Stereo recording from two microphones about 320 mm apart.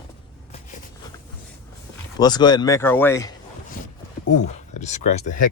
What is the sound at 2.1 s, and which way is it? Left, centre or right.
Speech, centre.